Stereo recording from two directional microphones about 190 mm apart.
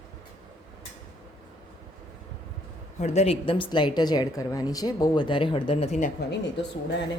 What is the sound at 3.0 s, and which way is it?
A woman's voice, 35° left (ahead or behind).